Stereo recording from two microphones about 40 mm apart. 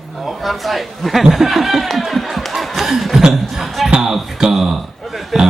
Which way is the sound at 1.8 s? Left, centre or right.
Centre.